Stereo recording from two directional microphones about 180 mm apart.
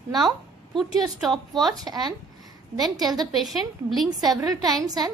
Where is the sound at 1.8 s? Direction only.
20° right (ahead or behind).